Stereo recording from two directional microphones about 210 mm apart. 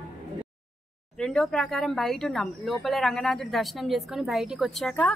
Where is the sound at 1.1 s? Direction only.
5° left (ahead or behind).